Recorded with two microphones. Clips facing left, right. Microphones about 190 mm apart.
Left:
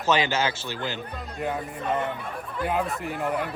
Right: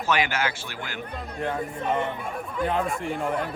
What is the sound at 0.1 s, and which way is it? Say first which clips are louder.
Speech: left 2 dB; 25° left (ahead or behind).